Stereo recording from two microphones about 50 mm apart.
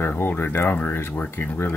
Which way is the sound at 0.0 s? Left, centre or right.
Left.